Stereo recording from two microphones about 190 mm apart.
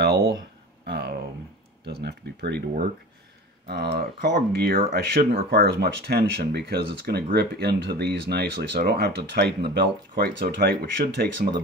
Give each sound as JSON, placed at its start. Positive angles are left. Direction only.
{"t": 0.0, "sound": "a sound", "side_deg": -60}
{"t": 1.9, "sound": "speech", "side_deg": -60}
{"t": 3.6, "sound": "speech", "side_deg": -55}